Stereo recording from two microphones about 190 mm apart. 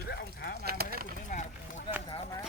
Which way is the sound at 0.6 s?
55° right (ahead or behind).